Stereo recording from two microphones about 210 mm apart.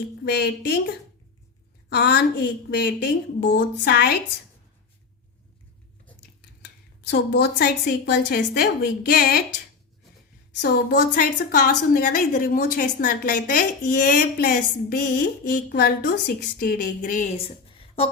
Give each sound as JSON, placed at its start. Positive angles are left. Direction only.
{"t": 0.3, "sound": "a woman's voice", "side_deg": 50}
{"t": 6.6, "sound": "a woman's voice", "side_deg": 55}
{"t": 10.6, "sound": "a woman's voice", "side_deg": 45}